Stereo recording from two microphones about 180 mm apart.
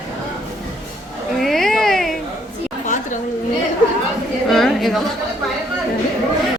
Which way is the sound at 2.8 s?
45° left (ahead or behind).